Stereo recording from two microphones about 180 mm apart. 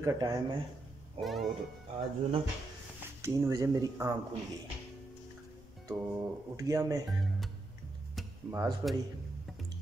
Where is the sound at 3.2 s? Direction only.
15° right (ahead or behind).